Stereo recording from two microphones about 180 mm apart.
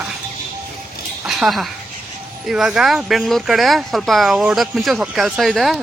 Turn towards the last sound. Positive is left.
turn(degrees=0)  # may be behind; listen again after turning